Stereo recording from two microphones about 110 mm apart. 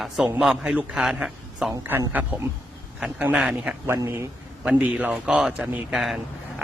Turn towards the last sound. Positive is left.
turn(degrees=0)  # may be behind; listen again after turning